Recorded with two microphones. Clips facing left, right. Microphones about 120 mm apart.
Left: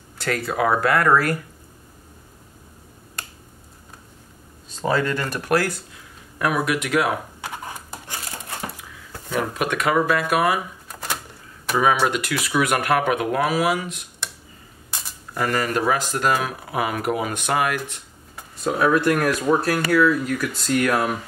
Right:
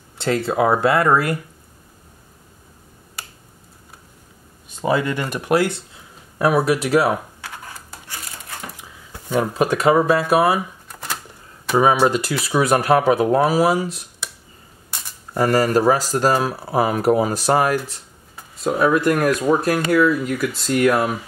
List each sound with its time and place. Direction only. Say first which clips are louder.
0.2 s speech: right 4 dB; 25° right (ahead or behind)
4.6 s speech: right 2 dB; 15° right (ahead or behind)
6.3 s speech: right 5 dB; 30° right (ahead or behind)
7.4 s a sound: left 3 dB; 20° left (ahead or behind)
9.4 s speech: right 5 dB; 30° right (ahead or behind)
10.9 s typewriter: even; centre (ahead or behind)
11.7 s speech: right 4 dB; 35° right (ahead or behind)
14.9 s a sound: even; 5° left (ahead or behind)
15.3 s speech: right 6 dB; 35° right (ahead or behind)
18.6 s speech: right 2 dB; centre (ahead or behind)